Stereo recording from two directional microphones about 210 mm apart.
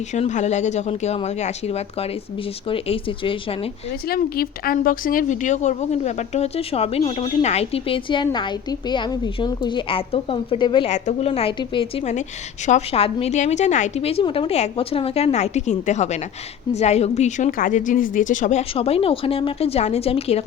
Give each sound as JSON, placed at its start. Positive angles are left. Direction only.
{"t": 0.1, "sound": "a woman's voice", "side_deg": 35}
{"t": 4.1, "sound": "a woman's voice", "side_deg": 45}